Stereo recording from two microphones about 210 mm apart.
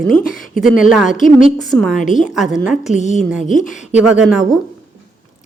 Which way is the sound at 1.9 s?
35° left (ahead or behind).